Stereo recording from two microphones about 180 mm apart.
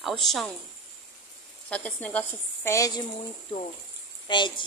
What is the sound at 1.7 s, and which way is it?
A woman's voice, 5° left (ahead or behind).